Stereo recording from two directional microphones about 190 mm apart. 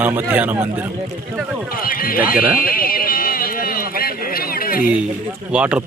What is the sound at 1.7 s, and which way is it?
Speech, 50° left (ahead or behind).